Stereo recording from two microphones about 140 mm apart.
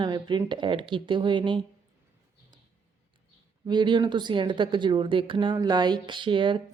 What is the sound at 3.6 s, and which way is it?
Speech, 35° right (ahead or behind).